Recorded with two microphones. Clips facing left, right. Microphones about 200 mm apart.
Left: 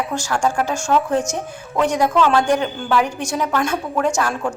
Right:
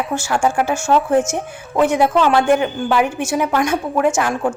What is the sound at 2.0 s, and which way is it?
A woman's voice, 15° right (ahead or behind).